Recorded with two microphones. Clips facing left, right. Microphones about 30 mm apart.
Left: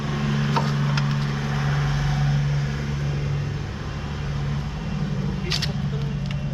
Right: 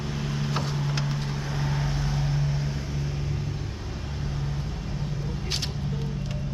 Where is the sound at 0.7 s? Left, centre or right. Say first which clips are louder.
Left 5 dB; left.